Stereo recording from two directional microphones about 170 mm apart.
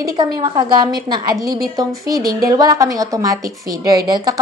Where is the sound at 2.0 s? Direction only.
60° right (ahead or behind).